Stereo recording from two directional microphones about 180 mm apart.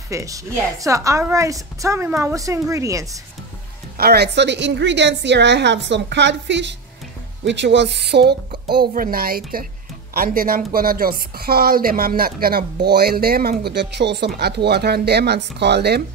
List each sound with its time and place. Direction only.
0.1 s a woman's voice: 20° right (ahead or behind)
4.0 s a woman's voice: 65° right (ahead or behind)
8.9 s a woman's voice: 55° right (ahead or behind)
13.7 s a woman's voice: 70° right (ahead or behind)